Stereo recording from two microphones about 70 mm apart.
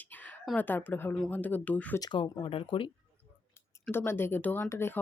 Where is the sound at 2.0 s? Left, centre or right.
Left.